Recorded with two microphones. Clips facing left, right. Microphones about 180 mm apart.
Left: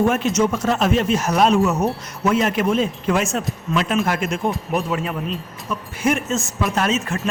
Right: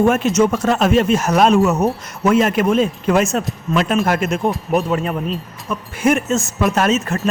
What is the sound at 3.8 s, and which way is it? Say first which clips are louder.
Speech: right 4 dB; 45° right (ahead or behind).